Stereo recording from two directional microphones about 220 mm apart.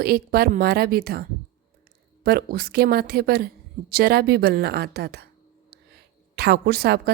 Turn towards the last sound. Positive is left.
turn(degrees=-45)  # may be behind; listen again after turning